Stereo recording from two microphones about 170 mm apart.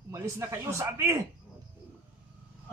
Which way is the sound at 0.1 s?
15° right (ahead or behind).